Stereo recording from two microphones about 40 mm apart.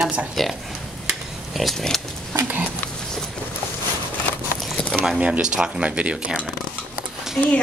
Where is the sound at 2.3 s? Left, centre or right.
Right.